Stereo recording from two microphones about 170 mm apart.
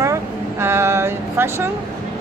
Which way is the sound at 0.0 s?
15° right (ahead or behind).